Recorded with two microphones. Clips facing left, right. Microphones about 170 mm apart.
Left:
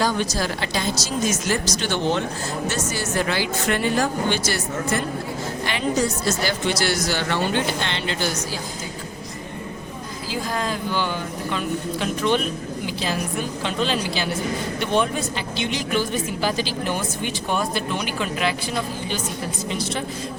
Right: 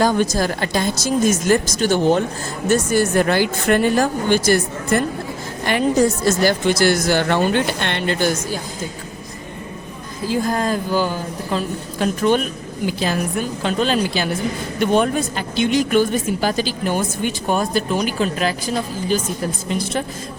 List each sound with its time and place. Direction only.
0.0 s speech: 50° right (ahead or behind)
10.4 s a woman's voice: 45° right (ahead or behind)